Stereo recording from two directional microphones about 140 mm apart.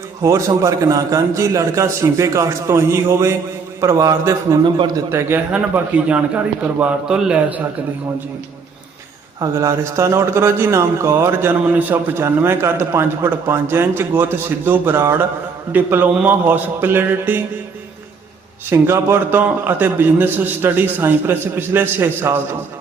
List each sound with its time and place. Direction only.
0.2 s a man's voice: 20° right (ahead or behind)
5.1 s a man's voice: 15° right (ahead or behind)
9.4 s a man's voice: 20° right (ahead or behind)
18.7 s a man's voice: 15° right (ahead or behind)